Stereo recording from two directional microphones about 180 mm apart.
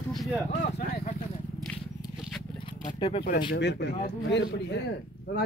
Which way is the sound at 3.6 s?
75° left (ahead or behind).